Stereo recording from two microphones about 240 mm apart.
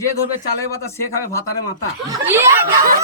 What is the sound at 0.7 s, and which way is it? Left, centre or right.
Speech, centre.